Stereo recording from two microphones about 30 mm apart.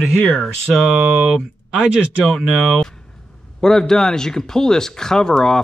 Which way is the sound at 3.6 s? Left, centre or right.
Centre.